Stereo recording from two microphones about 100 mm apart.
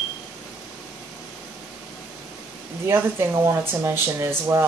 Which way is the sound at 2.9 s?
25° right (ahead or behind).